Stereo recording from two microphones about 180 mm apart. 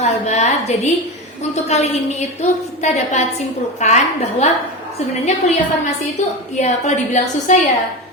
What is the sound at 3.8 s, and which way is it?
Speech, 40° left (ahead or behind).